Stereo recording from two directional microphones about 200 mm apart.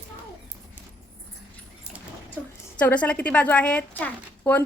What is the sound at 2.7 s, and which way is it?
A woman's voice, 5° left (ahead or behind).